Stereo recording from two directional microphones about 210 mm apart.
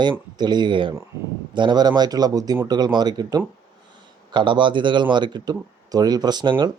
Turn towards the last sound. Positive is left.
turn(degrees=-20)  # may be behind; listen again after turning